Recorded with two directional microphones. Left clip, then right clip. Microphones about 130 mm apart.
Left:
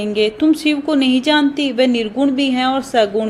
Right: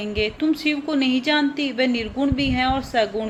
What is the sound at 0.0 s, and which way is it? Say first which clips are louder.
A woman's voice: left 7 dB; 45° left (ahead or behind).